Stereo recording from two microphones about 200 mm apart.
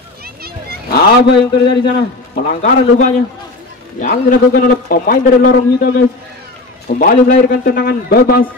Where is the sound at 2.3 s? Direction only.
40° left (ahead or behind).